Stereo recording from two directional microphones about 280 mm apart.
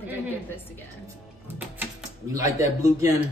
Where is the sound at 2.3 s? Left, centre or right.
Centre.